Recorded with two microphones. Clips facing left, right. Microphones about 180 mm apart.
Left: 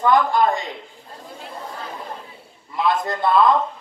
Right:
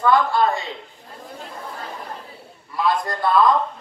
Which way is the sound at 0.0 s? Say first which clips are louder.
Left 1 dB; 15° left (ahead or behind).